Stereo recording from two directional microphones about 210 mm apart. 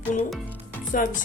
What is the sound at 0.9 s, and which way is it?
Speech, 40° left (ahead or behind).